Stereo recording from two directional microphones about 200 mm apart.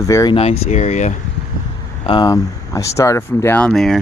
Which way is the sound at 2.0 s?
25° left (ahead or behind).